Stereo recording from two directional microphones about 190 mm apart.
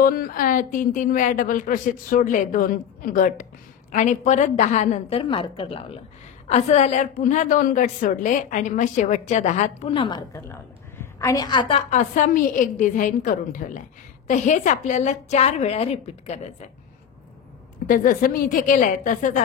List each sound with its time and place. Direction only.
0.0 s a woman's voice: 50° left (ahead or behind); by 11.8 s 20° left (ahead or behind)
11.9 s a woman's voice: 40° left (ahead or behind)
17.8 s a woman's voice: 45° left (ahead or behind)